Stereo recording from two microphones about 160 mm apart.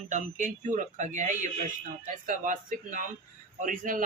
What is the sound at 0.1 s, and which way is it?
Speech, 50° right (ahead or behind).